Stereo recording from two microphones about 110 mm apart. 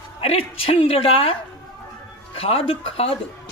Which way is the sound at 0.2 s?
60° left (ahead or behind).